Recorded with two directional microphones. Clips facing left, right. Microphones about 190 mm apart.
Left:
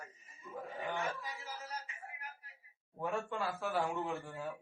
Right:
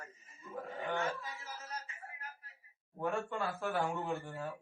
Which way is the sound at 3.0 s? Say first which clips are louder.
Right 1 dB; centre (ahead or behind).